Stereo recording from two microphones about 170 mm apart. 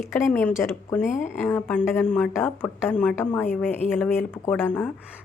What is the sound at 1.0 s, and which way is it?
Speech, 45° left (ahead or behind).